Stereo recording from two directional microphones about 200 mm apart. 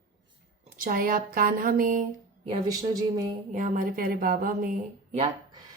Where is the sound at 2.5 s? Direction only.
20° right (ahead or behind).